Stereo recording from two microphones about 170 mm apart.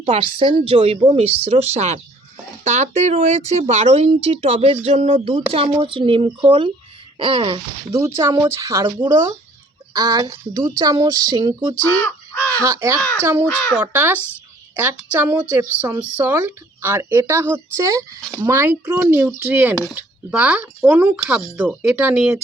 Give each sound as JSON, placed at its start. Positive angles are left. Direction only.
{"t": 0.0, "sound": "speech", "side_deg": -30}
{"t": 7.9, "sound": "a woman's voice", "side_deg": -20}
{"t": 14.2, "sound": "a woman's voice", "side_deg": 15}
{"t": 15.1, "sound": "a woman's voice", "side_deg": -10}